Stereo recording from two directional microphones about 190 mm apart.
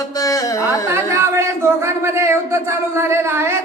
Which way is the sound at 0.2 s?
20° left (ahead or behind).